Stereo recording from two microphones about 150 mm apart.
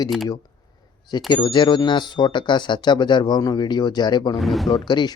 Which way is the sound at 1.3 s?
30° left (ahead or behind).